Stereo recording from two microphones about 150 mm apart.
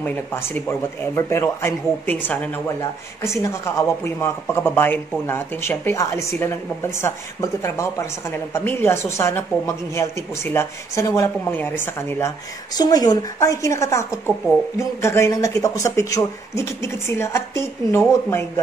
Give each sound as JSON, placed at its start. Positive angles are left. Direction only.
{"t": 0.0, "sound": "speech", "side_deg": 15}
{"t": 12.7, "sound": "speech", "side_deg": 25}